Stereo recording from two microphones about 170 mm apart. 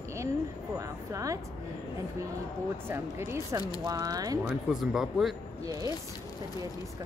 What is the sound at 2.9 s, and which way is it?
A woman's voice, 15° right (ahead or behind).